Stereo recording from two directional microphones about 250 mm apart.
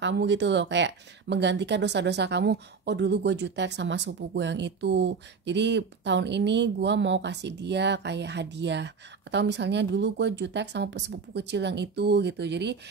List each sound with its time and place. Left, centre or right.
0.0 s speech: right